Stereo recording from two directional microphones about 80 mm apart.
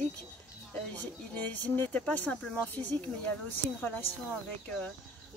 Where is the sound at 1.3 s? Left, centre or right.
Left.